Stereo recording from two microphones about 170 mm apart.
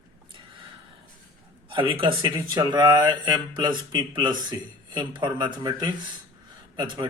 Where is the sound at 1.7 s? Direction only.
30° right (ahead or behind).